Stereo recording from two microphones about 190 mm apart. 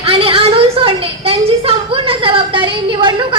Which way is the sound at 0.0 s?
30° right (ahead or behind).